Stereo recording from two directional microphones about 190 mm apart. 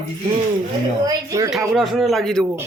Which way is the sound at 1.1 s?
15° right (ahead or behind).